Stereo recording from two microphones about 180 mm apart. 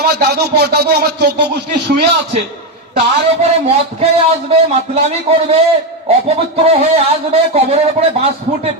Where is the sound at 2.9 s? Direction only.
35° right (ahead or behind).